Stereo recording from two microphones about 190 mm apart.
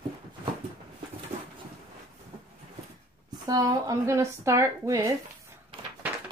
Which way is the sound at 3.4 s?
20° right (ahead or behind).